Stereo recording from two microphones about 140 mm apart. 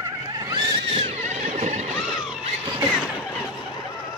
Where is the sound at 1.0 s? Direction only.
55° right (ahead or behind).